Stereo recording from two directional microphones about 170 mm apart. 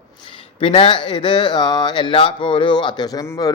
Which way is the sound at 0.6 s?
30° left (ahead or behind).